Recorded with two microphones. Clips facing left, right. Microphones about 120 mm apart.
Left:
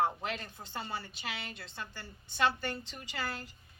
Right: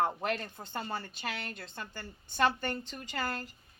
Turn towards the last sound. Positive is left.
turn(degrees=-45)  # may be behind; listen again after turning